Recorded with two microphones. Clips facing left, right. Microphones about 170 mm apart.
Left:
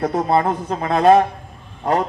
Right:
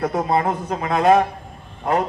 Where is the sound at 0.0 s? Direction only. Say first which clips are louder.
Left 2 dB; 35° left (ahead or behind).